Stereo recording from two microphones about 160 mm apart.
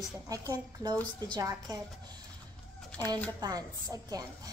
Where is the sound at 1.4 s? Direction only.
20° right (ahead or behind).